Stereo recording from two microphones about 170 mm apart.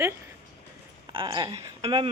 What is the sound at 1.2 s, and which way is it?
Speech, 25° right (ahead or behind).